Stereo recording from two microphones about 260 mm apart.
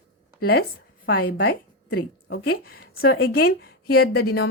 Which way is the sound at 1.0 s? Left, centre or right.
Left.